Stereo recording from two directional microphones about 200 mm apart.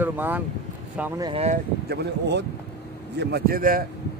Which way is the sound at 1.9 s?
55° right (ahead or behind).